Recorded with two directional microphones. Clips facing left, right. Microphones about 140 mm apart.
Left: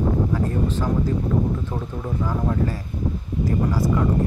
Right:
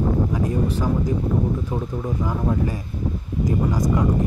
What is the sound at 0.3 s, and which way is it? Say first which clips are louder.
Speech: right 1 dB; 15° right (ahead or behind).